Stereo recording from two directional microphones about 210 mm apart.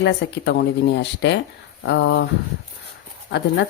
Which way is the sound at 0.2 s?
55° left (ahead or behind).